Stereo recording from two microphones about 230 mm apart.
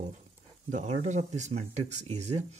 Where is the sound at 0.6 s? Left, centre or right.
Right.